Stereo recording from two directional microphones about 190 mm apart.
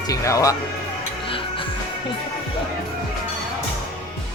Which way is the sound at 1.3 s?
30° left (ahead or behind).